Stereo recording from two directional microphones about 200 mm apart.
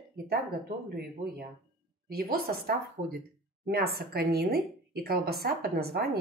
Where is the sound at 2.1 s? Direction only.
50° right (ahead or behind).